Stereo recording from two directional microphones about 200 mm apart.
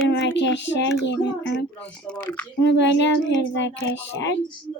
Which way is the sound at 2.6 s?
60° left (ahead or behind).